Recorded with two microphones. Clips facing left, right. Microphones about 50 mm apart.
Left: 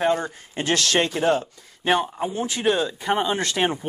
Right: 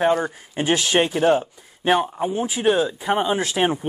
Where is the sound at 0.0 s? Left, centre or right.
Centre.